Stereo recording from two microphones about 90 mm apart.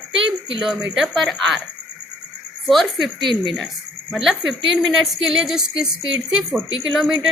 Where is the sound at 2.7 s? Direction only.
Centre (ahead or behind).